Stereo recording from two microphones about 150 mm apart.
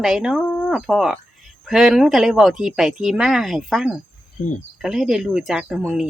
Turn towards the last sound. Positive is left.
turn(degrees=-5)  # may be behind; listen again after turning